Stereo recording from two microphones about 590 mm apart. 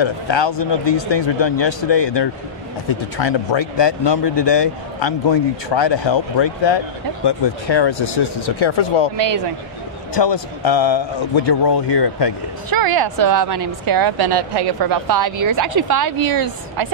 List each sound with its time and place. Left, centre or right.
0.0 s a man's voice: left
10.1 s a man's voice: left
12.6 s a woman's voice: right